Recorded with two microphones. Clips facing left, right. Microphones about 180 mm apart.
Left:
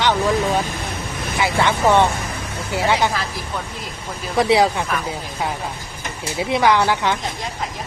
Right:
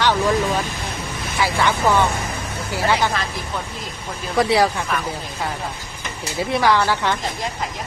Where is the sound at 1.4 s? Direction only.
20° left (ahead or behind).